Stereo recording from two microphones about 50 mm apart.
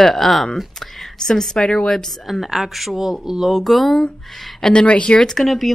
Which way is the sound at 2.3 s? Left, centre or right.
Centre.